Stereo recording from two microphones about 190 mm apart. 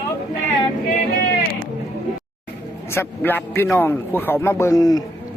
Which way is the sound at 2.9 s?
10° left (ahead or behind).